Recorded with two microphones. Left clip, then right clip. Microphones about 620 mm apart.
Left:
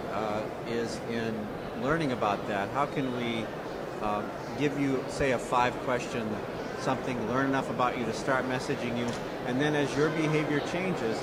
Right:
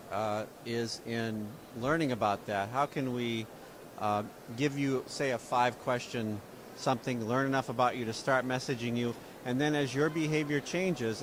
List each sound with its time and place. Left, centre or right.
0.7 s speech: right
4.6 s speech: right